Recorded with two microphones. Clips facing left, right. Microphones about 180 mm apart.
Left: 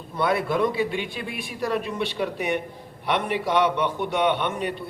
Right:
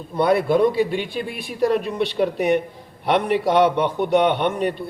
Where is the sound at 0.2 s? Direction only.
35° right (ahead or behind).